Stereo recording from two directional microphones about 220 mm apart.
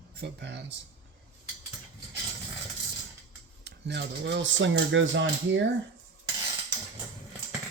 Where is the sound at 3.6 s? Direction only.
50° right (ahead or behind).